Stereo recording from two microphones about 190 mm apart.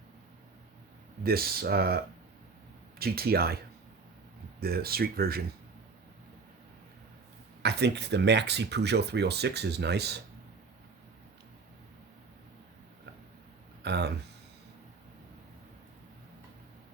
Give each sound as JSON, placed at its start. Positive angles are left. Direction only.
{"t": 1.2, "sound": "speech", "side_deg": -55}
{"t": 4.6, "sound": "speech", "side_deg": -55}
{"t": 7.6, "sound": "speech", "side_deg": -60}
{"t": 13.8, "sound": "speech", "side_deg": -60}